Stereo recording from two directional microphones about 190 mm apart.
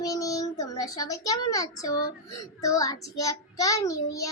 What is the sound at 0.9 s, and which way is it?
Speech, 20° left (ahead or behind).